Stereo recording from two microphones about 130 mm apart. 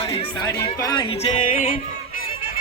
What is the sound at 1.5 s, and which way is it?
Music, 90° left.